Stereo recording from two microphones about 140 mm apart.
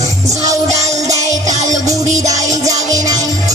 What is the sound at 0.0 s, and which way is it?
Music, 25° right (ahead or behind).